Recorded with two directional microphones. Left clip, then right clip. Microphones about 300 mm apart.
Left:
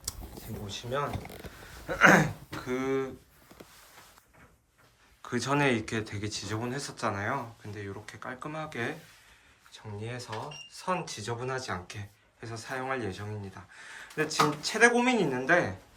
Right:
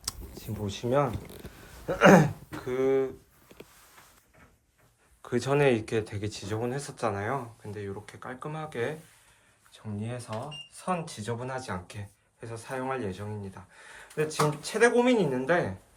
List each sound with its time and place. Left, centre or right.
0.7 s speech: right
1.9 s speech: centre
5.2 s speech: centre